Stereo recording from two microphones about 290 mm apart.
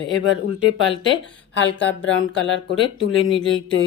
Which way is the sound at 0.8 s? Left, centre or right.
Left.